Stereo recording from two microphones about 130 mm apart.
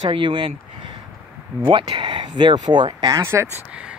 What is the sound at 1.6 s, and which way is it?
Speech, 40° right (ahead or behind).